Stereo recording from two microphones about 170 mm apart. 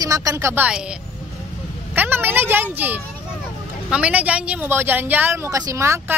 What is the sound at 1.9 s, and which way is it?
Speech, 10° right (ahead or behind).